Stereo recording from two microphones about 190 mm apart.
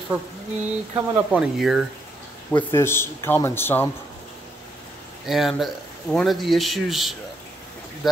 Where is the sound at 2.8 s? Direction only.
15° left (ahead or behind).